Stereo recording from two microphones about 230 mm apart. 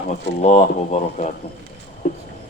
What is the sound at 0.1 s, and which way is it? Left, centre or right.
Speech, left.